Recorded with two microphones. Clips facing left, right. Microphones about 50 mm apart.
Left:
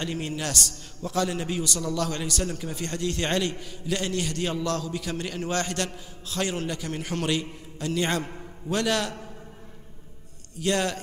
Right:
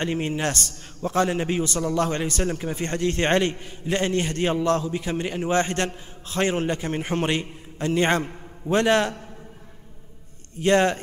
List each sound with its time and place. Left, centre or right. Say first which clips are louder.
0.0 s a man's voice: right 5 dB; right
10.5 s a man's voice: right 7 dB; right